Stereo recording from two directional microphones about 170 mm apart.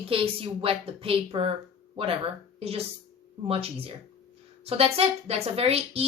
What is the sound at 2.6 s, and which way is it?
A woman's voice, 35° right (ahead or behind).